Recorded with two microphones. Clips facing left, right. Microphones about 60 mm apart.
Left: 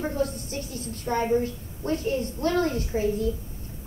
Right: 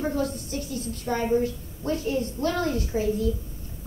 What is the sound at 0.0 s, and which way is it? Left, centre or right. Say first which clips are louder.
Speech: right 1 dB; left.